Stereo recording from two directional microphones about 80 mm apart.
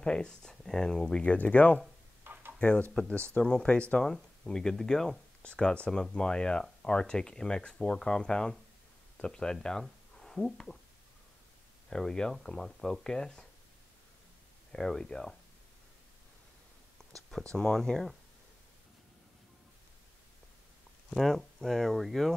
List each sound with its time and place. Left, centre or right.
0.0 s speech: centre
2.3 s a sound: right
2.6 s speech: centre
11.9 s speech: centre
14.7 s speech: centre
17.3 s speech: centre
21.1 s speech: centre